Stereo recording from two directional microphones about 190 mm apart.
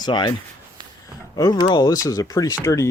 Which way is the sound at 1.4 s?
20° left (ahead or behind).